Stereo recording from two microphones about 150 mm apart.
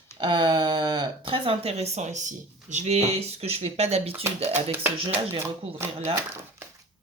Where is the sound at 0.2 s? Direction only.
30° right (ahead or behind).